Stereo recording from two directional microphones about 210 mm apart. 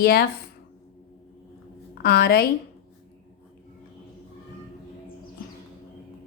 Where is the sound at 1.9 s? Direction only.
50° left (ahead or behind).